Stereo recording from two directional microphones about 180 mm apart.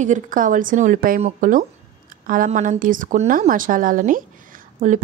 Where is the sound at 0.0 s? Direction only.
45° right (ahead or behind).